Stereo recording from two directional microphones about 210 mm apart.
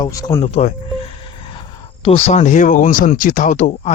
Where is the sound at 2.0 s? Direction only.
30° left (ahead or behind).